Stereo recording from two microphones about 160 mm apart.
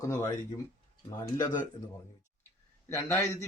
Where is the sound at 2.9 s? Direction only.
15° left (ahead or behind).